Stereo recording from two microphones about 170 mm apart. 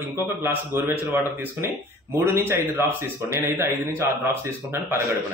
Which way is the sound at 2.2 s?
15° right (ahead or behind).